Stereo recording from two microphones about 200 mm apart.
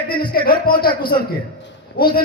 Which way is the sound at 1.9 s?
50° left (ahead or behind).